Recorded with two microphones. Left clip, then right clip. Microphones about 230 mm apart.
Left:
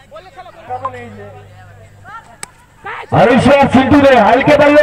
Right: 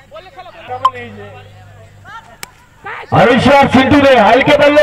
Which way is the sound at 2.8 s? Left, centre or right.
Left.